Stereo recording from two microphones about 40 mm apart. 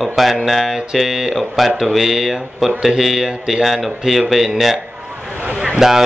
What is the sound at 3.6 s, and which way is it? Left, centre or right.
A man's voice, centre.